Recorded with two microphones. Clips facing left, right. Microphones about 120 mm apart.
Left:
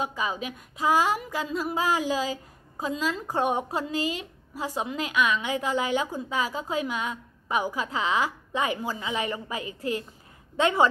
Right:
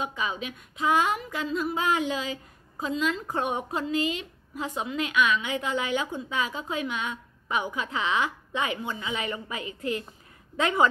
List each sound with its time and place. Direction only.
0.0 s a woman's voice: 35° left (ahead or behind)